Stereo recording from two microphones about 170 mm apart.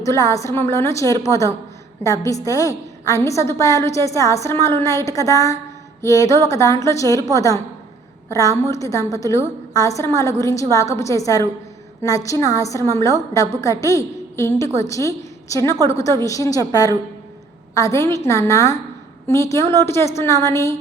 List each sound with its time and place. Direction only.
0.0 s a woman's voice: 20° left (ahead or behind)